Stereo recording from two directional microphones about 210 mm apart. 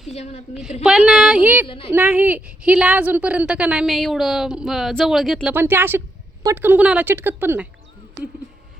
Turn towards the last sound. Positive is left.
turn(degrees=-10)  # may be behind; listen again after turning